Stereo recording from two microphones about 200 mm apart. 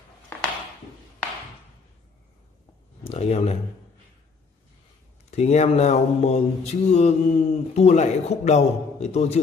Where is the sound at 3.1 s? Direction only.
30° left (ahead or behind).